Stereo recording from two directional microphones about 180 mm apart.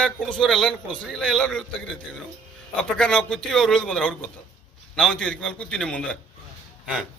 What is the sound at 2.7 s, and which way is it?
A man's voice, 5° left (ahead or behind).